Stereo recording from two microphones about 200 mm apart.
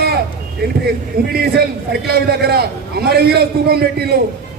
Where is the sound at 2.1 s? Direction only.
50° right (ahead or behind).